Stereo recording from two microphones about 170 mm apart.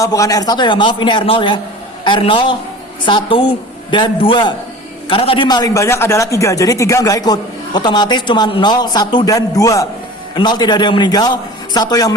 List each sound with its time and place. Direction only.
0.0 s a man's voice: 20° left (ahead or behind)